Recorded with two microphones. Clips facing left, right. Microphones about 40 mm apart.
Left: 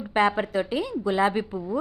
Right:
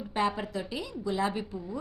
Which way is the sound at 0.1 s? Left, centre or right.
Left.